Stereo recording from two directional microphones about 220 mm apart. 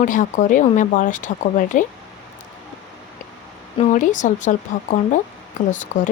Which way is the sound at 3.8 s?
35° left (ahead or behind).